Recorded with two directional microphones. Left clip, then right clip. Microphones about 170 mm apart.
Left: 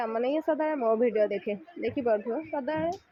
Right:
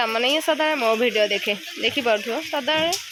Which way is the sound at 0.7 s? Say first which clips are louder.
Right 6 dB; 30° right (ahead or behind).